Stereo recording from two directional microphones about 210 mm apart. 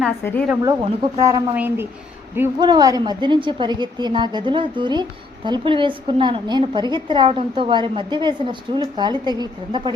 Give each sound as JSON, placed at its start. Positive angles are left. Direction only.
{"t": 0.0, "sound": "a woman's voice", "side_deg": 5}
{"t": 0.6, "sound": "a woman's voice", "side_deg": -20}